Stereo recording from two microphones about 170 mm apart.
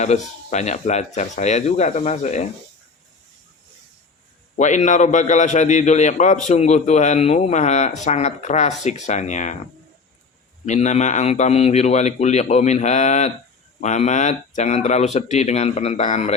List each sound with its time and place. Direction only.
0.0 s speech: 40° left (ahead or behind)
4.5 s a man's voice: 45° left (ahead or behind)
10.7 s a man's voice: 40° left (ahead or behind)